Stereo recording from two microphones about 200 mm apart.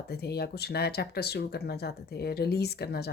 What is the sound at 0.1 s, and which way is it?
Speech, 55° left (ahead or behind).